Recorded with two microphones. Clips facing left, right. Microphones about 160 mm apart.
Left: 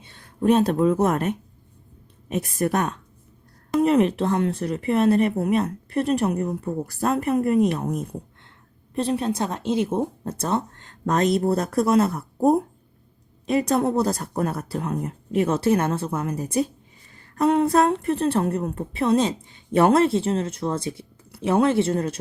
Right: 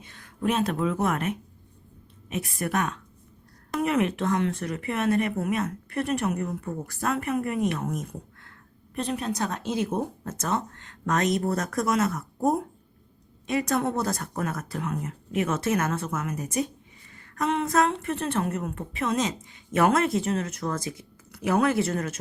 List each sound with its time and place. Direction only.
0.0 s a woman's voice: 25° left (ahead or behind)